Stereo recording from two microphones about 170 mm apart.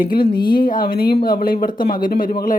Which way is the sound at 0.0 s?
60° left (ahead or behind).